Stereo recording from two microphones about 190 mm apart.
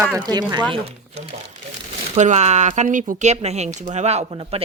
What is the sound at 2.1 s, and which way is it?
Speech, 35° right (ahead or behind).